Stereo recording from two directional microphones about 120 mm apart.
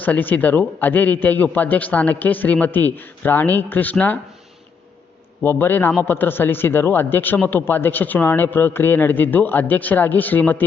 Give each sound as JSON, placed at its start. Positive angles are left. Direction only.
{"t": 0.0, "sound": "speech", "side_deg": 15}
{"t": 5.4, "sound": "speech", "side_deg": 15}